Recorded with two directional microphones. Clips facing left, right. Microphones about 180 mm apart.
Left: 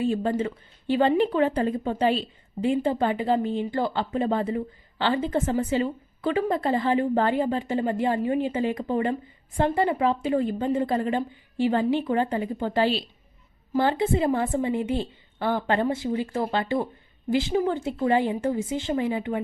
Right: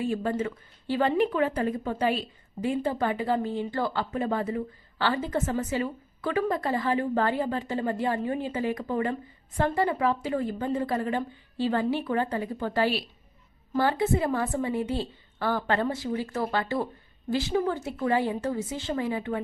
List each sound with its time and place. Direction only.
0.0 s a woman's voice: 25° left (ahead or behind)